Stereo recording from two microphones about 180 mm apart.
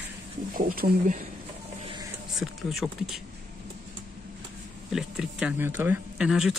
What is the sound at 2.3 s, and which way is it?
Speech, centre (ahead or behind).